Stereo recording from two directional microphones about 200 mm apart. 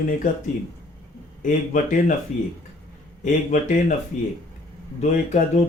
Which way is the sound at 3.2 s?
40° left (ahead or behind).